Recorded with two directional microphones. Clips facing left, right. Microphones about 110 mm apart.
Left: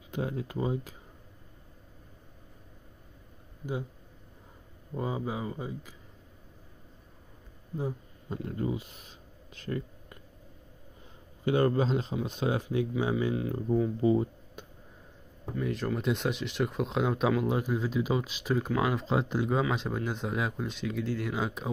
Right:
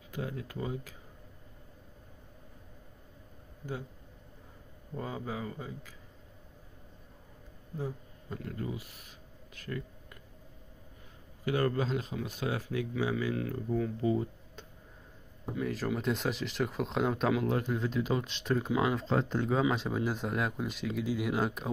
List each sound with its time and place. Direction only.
0.1 s speech: 25° left (ahead or behind)
4.9 s speech: 15° left (ahead or behind)
7.7 s speech: 20° left (ahead or behind)
9.6 s a sound: 30° left (ahead or behind)
11.4 s speech: 25° left (ahead or behind)
15.5 s speech: centre (ahead or behind)